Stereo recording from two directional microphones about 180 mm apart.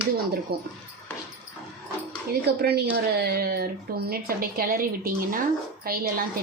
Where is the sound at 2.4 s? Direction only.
60° right (ahead or behind).